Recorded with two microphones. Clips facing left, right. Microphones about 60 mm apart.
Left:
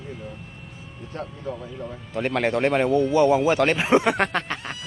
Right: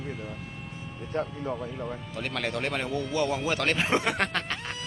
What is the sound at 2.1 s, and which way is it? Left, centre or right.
Speech, left.